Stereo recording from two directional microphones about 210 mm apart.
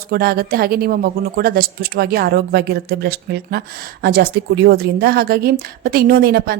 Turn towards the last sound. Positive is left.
turn(degrees=-50)  # may be behind; listen again after turning